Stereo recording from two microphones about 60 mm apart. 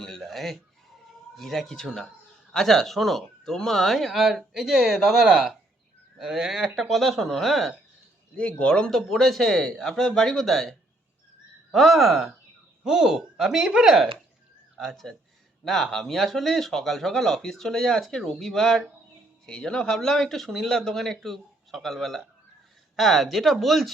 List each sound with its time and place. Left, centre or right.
0.0 s a sound: centre
1.4 s speech: centre
8.4 s speech: left
8.9 s speech: centre
20.5 s speech: centre
20.7 s speech: centre